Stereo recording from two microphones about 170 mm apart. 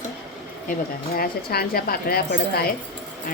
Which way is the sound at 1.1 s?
65° left (ahead or behind).